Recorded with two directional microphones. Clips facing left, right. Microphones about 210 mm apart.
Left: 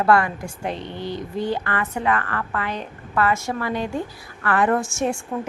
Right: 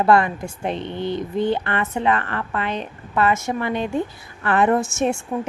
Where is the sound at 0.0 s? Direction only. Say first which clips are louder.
Right 2 dB; 20° right (ahead or behind).